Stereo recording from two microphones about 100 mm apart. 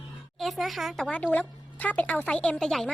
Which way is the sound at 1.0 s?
15° left (ahead or behind).